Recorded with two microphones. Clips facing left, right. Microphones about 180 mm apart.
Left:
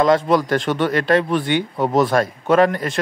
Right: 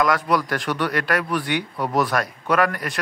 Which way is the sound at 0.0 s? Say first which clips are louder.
Left 5 dB; 25° left (ahead or behind).